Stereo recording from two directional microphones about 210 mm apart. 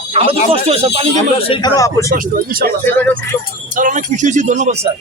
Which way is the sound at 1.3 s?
25° left (ahead or behind).